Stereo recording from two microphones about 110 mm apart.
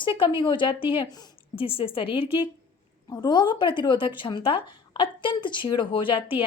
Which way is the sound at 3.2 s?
45° left (ahead or behind).